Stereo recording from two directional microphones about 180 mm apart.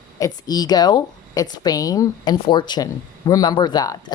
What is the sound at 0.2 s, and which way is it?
A woman's voice, 20° left (ahead or behind).